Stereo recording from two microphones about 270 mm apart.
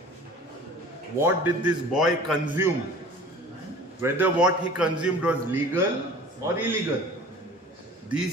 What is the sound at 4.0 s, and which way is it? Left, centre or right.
A man's voice, centre.